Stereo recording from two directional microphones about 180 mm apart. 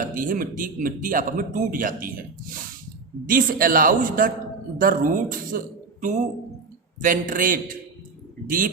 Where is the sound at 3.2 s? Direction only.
50° right (ahead or behind).